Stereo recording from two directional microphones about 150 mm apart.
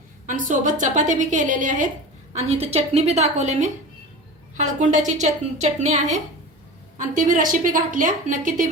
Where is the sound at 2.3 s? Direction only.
45° right (ahead or behind).